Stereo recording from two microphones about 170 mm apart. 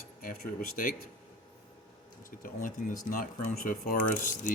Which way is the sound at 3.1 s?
55° left (ahead or behind).